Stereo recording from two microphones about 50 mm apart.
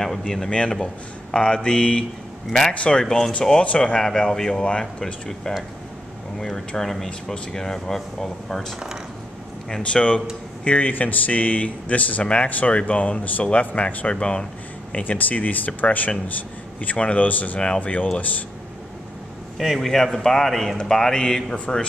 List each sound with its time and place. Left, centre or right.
0.5 s speech: left
3.0 s speech: centre
3.6 s speech: left; by 8.7 s centre
9.7 s speech: centre
19.6 s speech: centre